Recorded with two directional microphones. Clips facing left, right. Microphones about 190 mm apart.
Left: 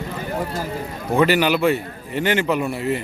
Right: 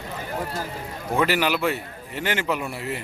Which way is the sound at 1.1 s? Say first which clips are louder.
Left 5 dB; centre (ahead or behind).